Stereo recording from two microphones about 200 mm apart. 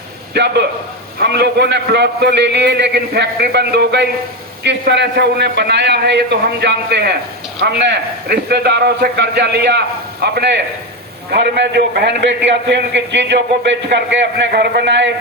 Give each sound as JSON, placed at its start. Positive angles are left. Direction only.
{"t": 0.3, "sound": "a man's voice", "side_deg": -55}